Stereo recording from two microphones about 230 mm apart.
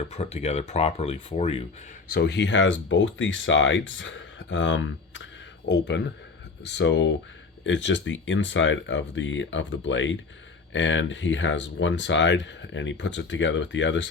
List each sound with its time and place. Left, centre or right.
0.1 s speech: left
2.0 s speech: left